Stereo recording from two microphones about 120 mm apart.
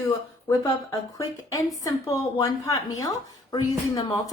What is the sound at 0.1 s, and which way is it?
Speech, 35° left (ahead or behind).